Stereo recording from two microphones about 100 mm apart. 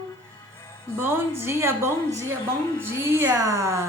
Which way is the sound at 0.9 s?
25° right (ahead or behind).